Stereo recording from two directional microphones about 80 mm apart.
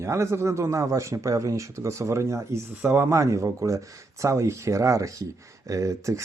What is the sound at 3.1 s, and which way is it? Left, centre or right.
Speech, right.